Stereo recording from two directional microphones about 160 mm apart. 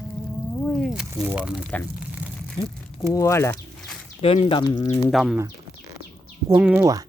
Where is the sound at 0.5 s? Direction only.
Centre (ahead or behind).